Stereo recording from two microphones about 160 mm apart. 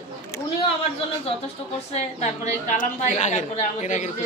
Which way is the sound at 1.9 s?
45° left (ahead or behind).